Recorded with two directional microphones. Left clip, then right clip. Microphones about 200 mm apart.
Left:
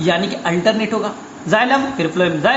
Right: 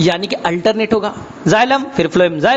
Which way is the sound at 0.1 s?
55° right (ahead or behind).